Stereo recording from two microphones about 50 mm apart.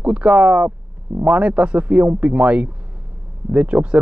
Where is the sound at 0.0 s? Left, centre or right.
Right.